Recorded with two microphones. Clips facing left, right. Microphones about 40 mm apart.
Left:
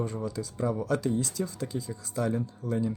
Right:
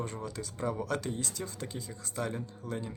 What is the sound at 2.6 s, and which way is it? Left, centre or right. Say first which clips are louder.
Speech: left 6 dB; right.